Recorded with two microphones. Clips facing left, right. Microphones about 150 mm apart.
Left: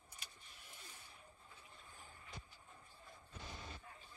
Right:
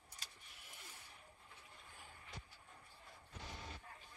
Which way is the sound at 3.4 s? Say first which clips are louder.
Even; 25° left (ahead or behind).